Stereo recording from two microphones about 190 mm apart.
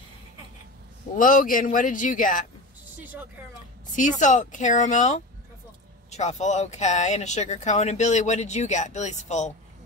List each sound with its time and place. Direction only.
1.1 s a man's voice: 45° left (ahead or behind)
3.0 s a woman's voice: 10° right (ahead or behind)
3.9 s speech: 40° left (ahead or behind)